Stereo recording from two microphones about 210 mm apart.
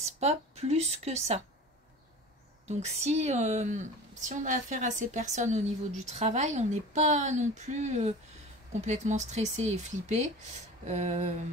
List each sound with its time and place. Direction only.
0.0 s a woman's voice: 30° right (ahead or behind)
2.7 s a woman's voice: 30° right (ahead or behind)